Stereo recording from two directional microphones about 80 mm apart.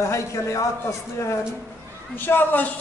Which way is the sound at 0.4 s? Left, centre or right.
Left.